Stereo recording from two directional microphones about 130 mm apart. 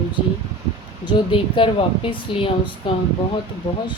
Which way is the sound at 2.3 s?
45° left (ahead or behind).